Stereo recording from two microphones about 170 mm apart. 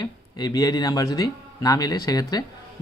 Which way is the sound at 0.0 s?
25° left (ahead or behind).